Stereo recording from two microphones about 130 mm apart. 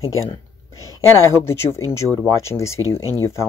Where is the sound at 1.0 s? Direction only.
20° left (ahead or behind).